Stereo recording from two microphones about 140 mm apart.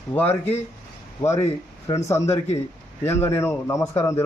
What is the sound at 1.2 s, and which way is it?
A man's voice, 20° left (ahead or behind).